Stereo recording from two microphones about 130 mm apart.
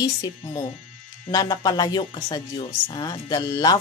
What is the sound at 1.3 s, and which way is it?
Speech, 30° left (ahead or behind).